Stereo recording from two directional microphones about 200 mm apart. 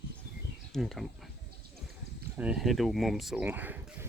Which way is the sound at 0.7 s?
Centre (ahead or behind).